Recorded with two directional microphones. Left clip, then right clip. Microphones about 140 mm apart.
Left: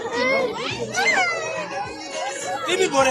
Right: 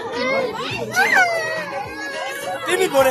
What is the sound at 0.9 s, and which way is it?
Speech, 35° right (ahead or behind).